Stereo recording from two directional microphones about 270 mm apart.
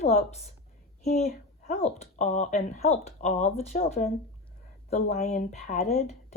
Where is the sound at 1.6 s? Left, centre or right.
Left.